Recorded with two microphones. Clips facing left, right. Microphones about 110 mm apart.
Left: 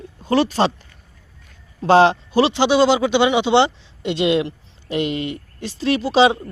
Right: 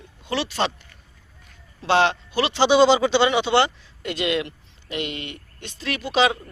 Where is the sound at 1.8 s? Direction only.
40° left (ahead or behind).